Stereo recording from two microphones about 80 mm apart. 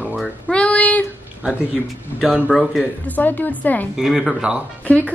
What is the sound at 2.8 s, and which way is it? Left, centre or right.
Speech, left.